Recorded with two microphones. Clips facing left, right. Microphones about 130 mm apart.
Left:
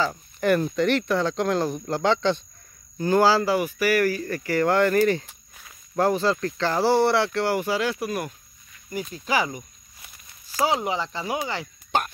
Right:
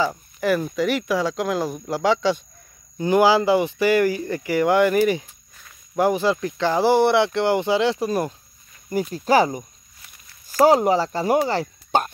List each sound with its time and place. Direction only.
0.4 s speech: 5° right (ahead or behind); by 12.1 s 35° right (ahead or behind)